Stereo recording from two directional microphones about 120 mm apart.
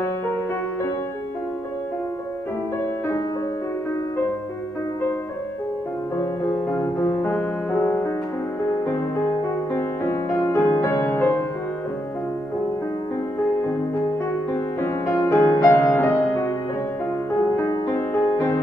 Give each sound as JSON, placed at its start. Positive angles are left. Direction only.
{"t": 6.1, "sound": "music", "side_deg": 20}
{"t": 9.4, "sound": "music", "side_deg": 20}
{"t": 14.5, "sound": "music", "side_deg": 20}
{"t": 17.6, "sound": "music", "side_deg": 20}